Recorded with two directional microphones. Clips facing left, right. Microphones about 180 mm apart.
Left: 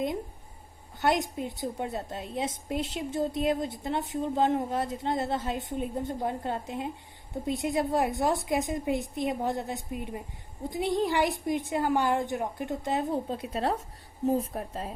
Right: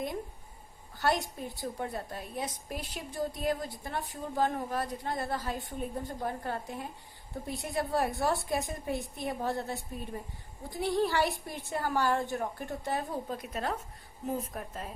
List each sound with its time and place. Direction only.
0.9 s a woman's voice: 20° left (ahead or behind)